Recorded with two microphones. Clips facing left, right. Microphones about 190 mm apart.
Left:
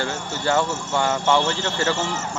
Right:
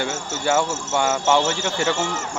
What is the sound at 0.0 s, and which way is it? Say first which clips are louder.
Speech: right 1 dB; 15° right (ahead or behind).